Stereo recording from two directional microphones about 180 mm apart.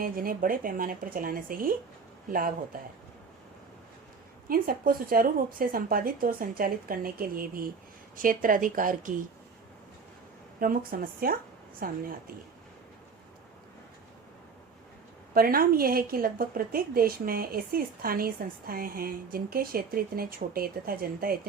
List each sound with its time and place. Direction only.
0.0 s a woman's voice: 50° right (ahead or behind)
4.4 s a woman's voice: 50° right (ahead or behind)
10.6 s a woman's voice: 50° right (ahead or behind)
15.4 s a woman's voice: 55° right (ahead or behind)